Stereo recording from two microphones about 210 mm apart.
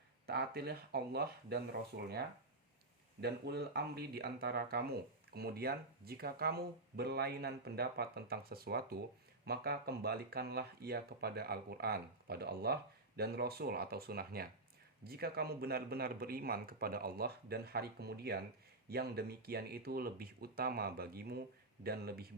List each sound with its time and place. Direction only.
0.3 s speech: 50° right (ahead or behind)
3.2 s speech: 50° right (ahead or behind)